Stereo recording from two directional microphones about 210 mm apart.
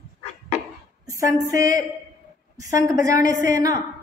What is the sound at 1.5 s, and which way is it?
A woman's voice, 15° right (ahead or behind).